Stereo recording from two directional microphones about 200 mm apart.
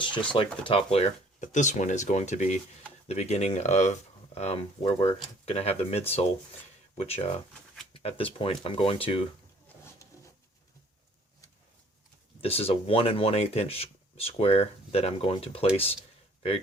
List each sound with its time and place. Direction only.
0.0 s speech: 25° left (ahead or behind)
12.4 s speech: 30° left (ahead or behind)